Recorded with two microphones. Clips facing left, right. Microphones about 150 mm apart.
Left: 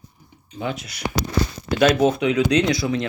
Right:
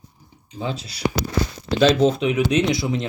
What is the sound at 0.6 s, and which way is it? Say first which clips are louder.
Speech: even; 30° right (ahead or behind).